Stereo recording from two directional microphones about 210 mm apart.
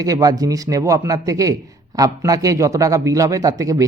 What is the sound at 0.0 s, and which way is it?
A man's voice, 15° right (ahead or behind).